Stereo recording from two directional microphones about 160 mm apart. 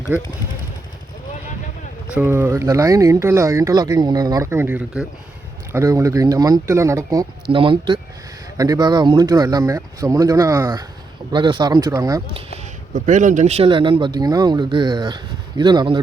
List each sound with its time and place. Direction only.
0.1 s speech: 10° right (ahead or behind)
2.1 s speech: 15° right (ahead or behind)
7.5 s speech: 35° right (ahead or behind)
8.5 s speech: 20° right (ahead or behind)
11.3 s speech: 30° right (ahead or behind)
12.9 s speech: 50° right (ahead or behind)
13.7 s speech: 30° right (ahead or behind)